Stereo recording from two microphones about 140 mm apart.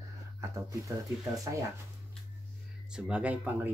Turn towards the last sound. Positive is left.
turn(degrees=-10)  # may be behind; listen again after turning